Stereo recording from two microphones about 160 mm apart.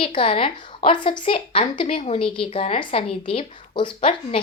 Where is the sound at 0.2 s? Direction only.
35° left (ahead or behind).